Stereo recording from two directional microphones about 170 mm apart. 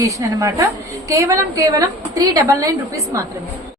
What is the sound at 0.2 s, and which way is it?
A woman's voice, 20° right (ahead or behind).